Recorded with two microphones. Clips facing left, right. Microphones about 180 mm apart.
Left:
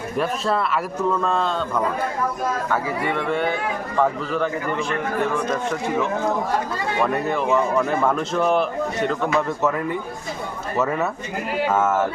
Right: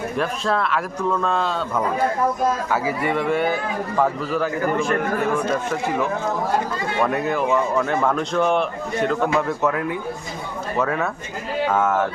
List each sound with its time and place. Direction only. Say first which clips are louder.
0.2 s a man's voice: left 1 dB; centre (ahead or behind)
4.6 s a man's voice: right 4 dB; 45° right (ahead or behind)
5.5 s a man's voice: right 1 dB; 5° right (ahead or behind)